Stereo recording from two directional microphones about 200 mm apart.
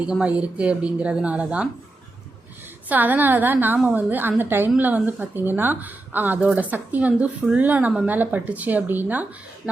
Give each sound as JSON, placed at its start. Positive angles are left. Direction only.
{"t": 0.0, "sound": "speech", "side_deg": -5}
{"t": 2.9, "sound": "a woman's voice", "side_deg": -10}